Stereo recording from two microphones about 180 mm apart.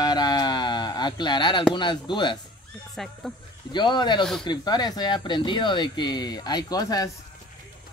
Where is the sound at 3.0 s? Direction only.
Centre (ahead or behind).